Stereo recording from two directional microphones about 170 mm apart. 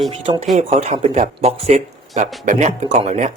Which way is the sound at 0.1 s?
35° right (ahead or behind).